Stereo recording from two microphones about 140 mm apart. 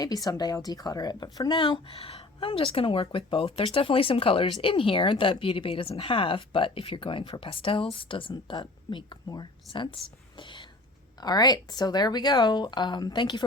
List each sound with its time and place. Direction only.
0.0 s speech: 25° left (ahead or behind)
1.6 s a woman's voice: 40° left (ahead or behind)
10.3 s whispering: 35° left (ahead or behind)
11.2 s a woman's voice: 30° left (ahead or behind)